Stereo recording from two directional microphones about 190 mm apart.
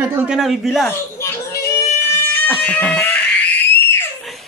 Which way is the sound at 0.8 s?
15° left (ahead or behind).